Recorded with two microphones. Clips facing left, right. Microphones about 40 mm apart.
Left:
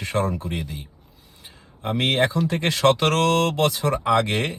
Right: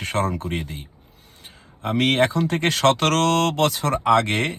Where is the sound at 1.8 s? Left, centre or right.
Right.